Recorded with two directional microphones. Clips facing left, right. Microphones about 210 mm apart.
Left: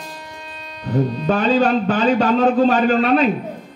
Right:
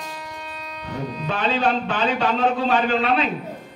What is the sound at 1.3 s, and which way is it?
A man's voice, 40° left (ahead or behind).